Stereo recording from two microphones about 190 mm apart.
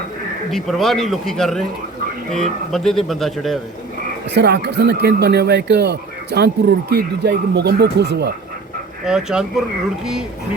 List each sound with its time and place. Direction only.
0.5 s speech: centre (ahead or behind)
4.4 s speech: 60° right (ahead or behind)
9.0 s speech: 5° right (ahead or behind)